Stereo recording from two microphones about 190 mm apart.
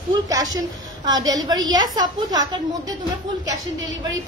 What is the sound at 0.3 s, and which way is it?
A woman's voice, 20° right (ahead or behind).